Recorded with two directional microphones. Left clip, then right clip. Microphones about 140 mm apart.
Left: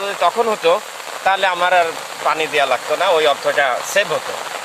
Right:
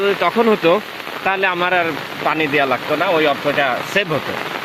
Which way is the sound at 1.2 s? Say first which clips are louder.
Left 2 dB; 20° left (ahead or behind).